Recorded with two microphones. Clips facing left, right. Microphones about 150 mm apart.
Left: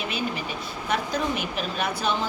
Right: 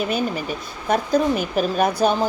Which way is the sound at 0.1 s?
45° right (ahead or behind).